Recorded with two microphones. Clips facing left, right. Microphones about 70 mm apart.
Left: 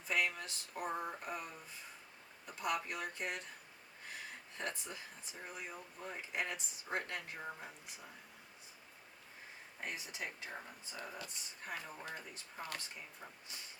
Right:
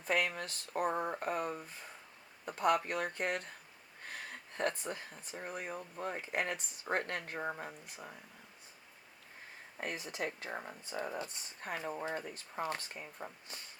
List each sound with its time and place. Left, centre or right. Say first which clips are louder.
0.0 s speech: right 3 dB; right
4.1 s a sound: right 3 dB; right
4.8 s speech: right 7 dB; right
9.8 s speech: right 6 dB; right